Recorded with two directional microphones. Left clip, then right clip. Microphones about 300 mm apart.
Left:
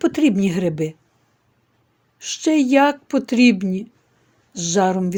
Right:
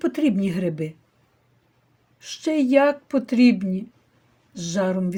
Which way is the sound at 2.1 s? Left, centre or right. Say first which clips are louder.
Left 5 dB; left.